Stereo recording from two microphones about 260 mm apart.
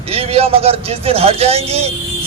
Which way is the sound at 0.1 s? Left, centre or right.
Right.